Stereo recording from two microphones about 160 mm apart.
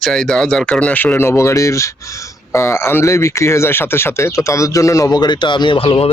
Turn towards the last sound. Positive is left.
turn(degrees=35)  # may be behind; listen again after turning